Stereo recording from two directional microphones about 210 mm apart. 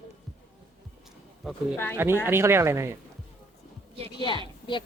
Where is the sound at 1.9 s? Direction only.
10° right (ahead or behind).